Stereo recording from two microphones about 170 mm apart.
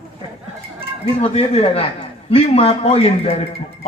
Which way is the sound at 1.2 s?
35° left (ahead or behind).